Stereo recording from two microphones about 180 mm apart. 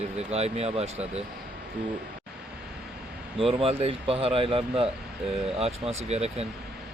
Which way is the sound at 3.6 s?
35° right (ahead or behind).